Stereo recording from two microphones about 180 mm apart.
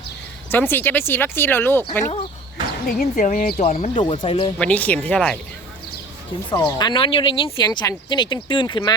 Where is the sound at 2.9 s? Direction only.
50° left (ahead or behind).